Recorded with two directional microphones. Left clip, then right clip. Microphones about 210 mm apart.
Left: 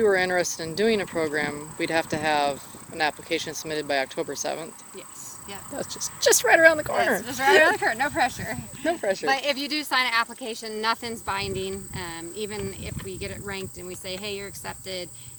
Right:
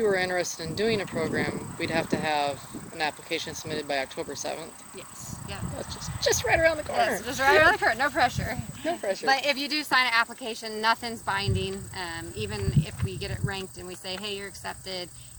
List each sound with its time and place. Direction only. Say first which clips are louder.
0.0 s speech: left 4 dB; 35° left (ahead or behind)
5.7 s speech: left 4 dB; 35° left (ahead or behind)
7.3 s speech: left 1 dB; centre (ahead or behind)
8.8 s speech: left 4 dB; 40° left (ahead or behind)
9.2 s speech: right 3 dB; 10° left (ahead or behind)